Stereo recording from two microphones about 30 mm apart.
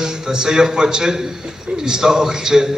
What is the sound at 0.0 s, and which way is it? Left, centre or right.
A man's voice, right.